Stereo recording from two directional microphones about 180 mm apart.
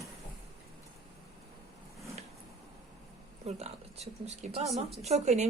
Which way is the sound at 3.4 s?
35° right (ahead or behind).